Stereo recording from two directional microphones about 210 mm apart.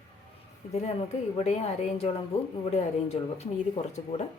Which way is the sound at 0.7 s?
30° left (ahead or behind).